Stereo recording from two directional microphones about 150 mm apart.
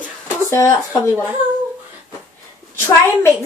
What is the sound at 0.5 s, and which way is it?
Speech, 20° left (ahead or behind).